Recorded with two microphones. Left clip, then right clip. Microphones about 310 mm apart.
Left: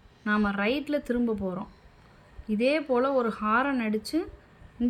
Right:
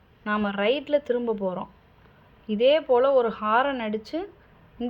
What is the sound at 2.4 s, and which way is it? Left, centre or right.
Speech, centre.